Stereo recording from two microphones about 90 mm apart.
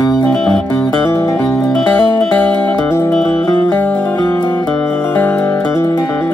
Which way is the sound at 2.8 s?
25° left (ahead or behind).